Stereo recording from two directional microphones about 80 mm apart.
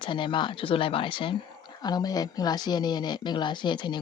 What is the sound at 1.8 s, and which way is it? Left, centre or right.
Speech, left.